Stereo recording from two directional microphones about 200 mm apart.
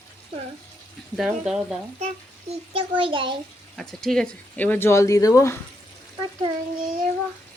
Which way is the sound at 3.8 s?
Centre (ahead or behind).